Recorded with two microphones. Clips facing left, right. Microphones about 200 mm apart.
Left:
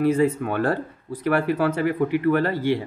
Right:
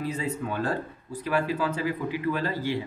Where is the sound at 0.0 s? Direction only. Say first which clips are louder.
Left 10 dB; 60° left (ahead or behind).